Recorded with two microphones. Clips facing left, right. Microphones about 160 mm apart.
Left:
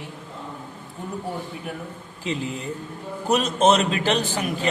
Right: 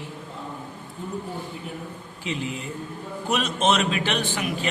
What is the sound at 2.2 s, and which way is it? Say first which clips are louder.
A man's voice: left 2 dB; 35° left (ahead or behind).